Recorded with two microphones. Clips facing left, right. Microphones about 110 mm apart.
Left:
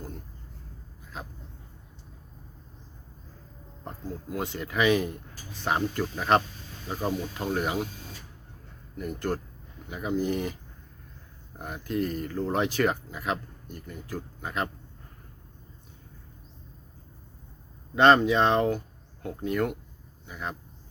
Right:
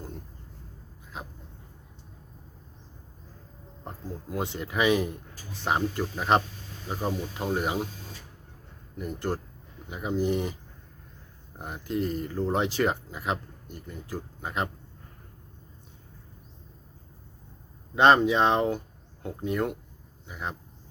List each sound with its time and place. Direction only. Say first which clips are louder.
1.1 s speech: even; 20° right (ahead or behind)
3.8 s speech: left 1 dB; 25° right (ahead or behind)
9.0 s speech: left 1 dB; 25° right (ahead or behind)
11.6 s speech: even; 25° right (ahead or behind)
17.9 s speech: even; 20° right (ahead or behind)